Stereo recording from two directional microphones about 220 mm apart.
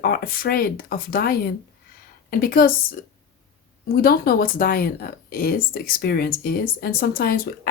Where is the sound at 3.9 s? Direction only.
45° left (ahead or behind).